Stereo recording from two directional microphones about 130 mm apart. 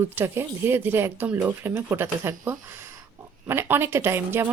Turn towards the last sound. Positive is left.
turn(degrees=-15)  # may be behind; listen again after turning